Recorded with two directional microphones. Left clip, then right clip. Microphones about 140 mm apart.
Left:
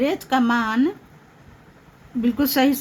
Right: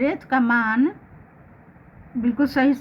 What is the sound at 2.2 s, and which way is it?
Speech, 35° left (ahead or behind).